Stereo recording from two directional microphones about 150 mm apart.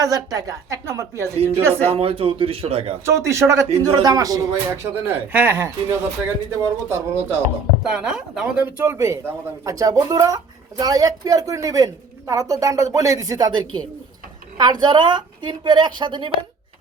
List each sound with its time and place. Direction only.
0.0 s a man's voice: 25° right (ahead or behind)
1.9 s a woman's voice: 40° right (ahead or behind)
3.1 s a man's voice: 20° right (ahead or behind)
7.9 s a man's voice: 5° right (ahead or behind); by 13.6 s 25° right (ahead or behind)
14.6 s a woman's voice: 30° right (ahead or behind)